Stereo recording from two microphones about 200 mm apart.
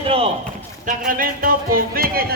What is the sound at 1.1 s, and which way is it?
Music, 45° right (ahead or behind).